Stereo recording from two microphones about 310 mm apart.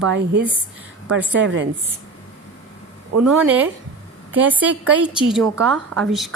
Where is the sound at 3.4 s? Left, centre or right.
Centre.